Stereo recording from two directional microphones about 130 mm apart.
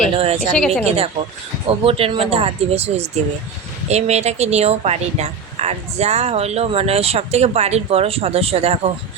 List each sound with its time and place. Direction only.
0.5 s a woman's voice: 5° left (ahead or behind)
0.9 s speech: 50° right (ahead or behind)